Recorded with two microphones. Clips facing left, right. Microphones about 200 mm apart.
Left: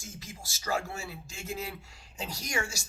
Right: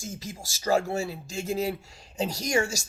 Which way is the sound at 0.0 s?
40° right (ahead or behind).